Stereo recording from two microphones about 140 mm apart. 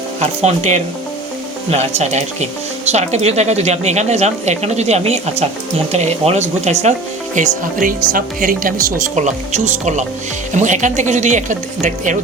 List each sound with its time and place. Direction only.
0.2 s speech: 50° right (ahead or behind)
7.3 s speech: 70° right (ahead or behind)